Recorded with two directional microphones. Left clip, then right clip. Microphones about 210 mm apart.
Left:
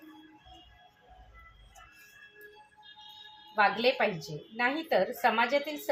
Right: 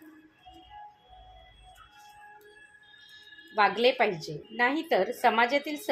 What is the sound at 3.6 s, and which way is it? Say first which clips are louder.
A woman's voice: right 2 dB; 45° right (ahead or behind).